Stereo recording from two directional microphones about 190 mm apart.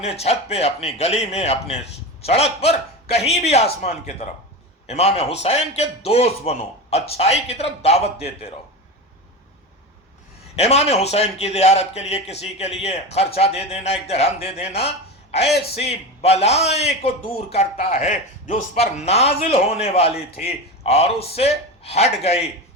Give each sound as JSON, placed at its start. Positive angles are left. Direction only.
{"t": 0.0, "sound": "a man's voice", "side_deg": 35}
{"t": 10.5, "sound": "a man's voice", "side_deg": 35}